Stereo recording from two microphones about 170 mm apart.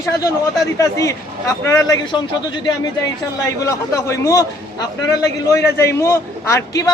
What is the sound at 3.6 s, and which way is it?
A man's voice, 20° left (ahead or behind).